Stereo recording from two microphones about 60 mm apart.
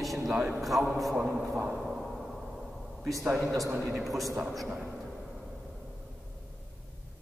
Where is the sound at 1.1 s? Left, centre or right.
Centre.